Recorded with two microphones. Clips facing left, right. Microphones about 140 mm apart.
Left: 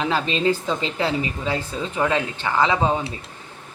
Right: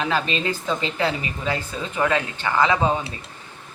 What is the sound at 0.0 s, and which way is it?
A woman's voice, 30° left (ahead or behind).